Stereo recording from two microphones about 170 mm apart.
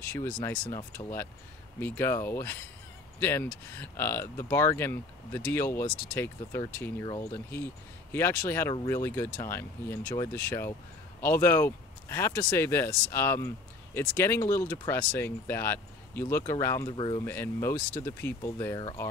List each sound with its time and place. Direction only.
0.1 s speech: 15° left (ahead or behind)
16.9 s speech: 30° left (ahead or behind)
17.2 s speech: 15° left (ahead or behind)